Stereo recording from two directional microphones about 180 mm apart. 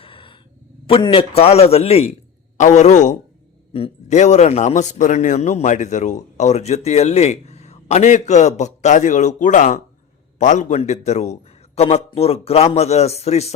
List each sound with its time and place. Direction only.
0.0 s sigh: 30° left (ahead or behind)
0.9 s a man's voice: 30° left (ahead or behind)
3.7 s a man's voice: 30° left (ahead or behind)